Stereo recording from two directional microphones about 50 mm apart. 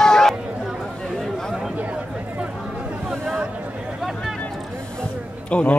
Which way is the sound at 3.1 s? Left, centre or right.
Centre.